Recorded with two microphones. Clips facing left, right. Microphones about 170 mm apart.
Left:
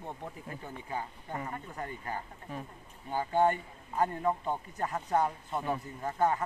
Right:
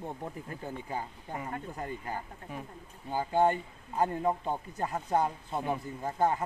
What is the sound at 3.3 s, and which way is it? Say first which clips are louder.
Speech: right 1 dB; 30° right (ahead or behind).